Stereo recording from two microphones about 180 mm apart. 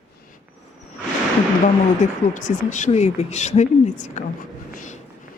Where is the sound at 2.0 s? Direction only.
45° left (ahead or behind).